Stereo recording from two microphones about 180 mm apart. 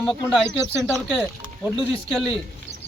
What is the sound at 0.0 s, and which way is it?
Speech, centre (ahead or behind).